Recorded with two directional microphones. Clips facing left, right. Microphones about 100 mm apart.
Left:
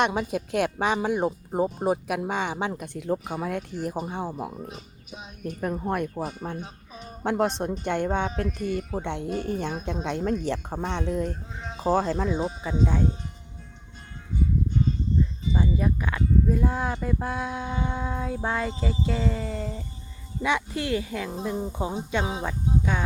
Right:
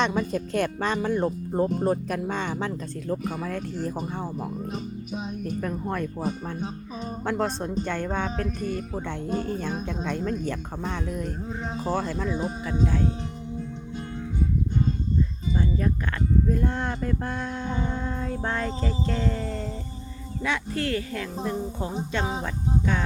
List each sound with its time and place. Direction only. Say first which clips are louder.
0.0 s speech: even; 15° left (ahead or behind)
4.7 s music: right 10 dB; 40° right (ahead or behind)
5.6 s speech: left 5 dB; 20° left (ahead or behind)
7.3 s speech: left 3 dB; 20° left (ahead or behind); by 12.3 s 35° left (ahead or behind)
15.5 s speech: left 1 dB; 10° left (ahead or behind)
20.4 s speech: left 1 dB; 15° left (ahead or behind)